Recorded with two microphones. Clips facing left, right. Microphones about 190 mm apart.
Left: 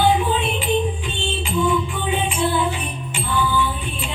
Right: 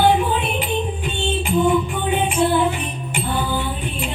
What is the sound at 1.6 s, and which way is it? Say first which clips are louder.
Music: right 3 dB; 50° right (ahead or behind).